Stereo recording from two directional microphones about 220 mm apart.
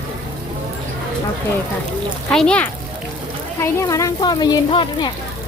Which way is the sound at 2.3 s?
5° left (ahead or behind).